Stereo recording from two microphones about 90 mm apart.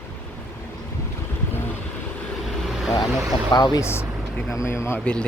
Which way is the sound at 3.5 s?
50° left (ahead or behind).